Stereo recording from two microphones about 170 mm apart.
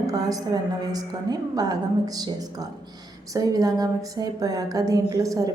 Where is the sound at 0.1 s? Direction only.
20° right (ahead or behind).